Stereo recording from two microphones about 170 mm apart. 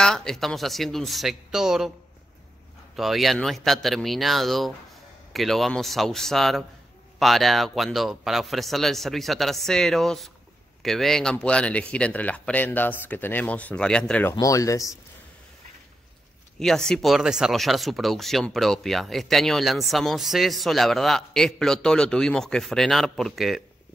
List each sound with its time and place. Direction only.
0.0 s speech: 5° left (ahead or behind)
3.0 s speech: centre (ahead or behind)
14.3 s speech: 20° left (ahead or behind)
16.5 s speech: centre (ahead or behind)